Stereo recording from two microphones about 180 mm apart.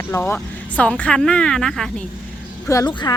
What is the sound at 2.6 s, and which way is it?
Speech, 15° left (ahead or behind).